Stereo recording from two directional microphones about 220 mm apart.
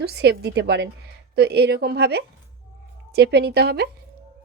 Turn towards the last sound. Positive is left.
turn(degrees=-45)  # may be behind; listen again after turning